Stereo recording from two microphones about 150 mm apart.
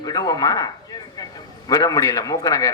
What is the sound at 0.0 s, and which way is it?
A man's voice, 25° left (ahead or behind).